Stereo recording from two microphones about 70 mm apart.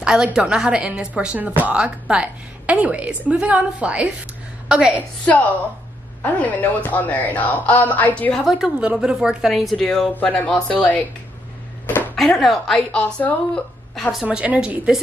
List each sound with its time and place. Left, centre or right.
0.0 s a woman's voice: centre
5.2 s a woman's voice: left
8.5 s speech: centre
8.7 s speech: centre; by 11.0 s left
12.4 s speech: centre
12.9 s a woman's voice: left
14.2 s a woman's voice: centre